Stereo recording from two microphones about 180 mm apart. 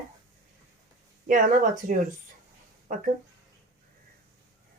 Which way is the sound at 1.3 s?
45° right (ahead or behind).